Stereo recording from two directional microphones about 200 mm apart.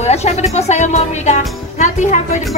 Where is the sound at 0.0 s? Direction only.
35° left (ahead or behind).